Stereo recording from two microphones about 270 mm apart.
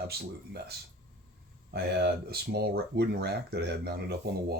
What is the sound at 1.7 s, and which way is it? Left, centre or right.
Speech, right.